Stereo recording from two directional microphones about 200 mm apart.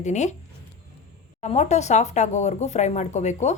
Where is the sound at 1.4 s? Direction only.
35° left (ahead or behind).